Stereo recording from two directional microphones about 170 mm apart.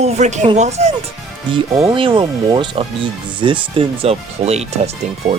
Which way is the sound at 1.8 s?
30° right (ahead or behind).